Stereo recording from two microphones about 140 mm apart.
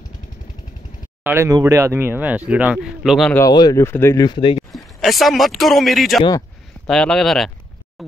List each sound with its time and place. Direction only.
1.2 s speech: 20° right (ahead or behind); by 3.3 s centre (ahead or behind)
3.3 s speech: 30° left (ahead or behind)
4.3 s speech: 35° left (ahead or behind)
4.7 s speech: centre (ahead or behind)